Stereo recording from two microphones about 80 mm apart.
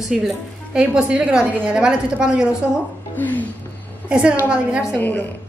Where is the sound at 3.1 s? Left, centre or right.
Left.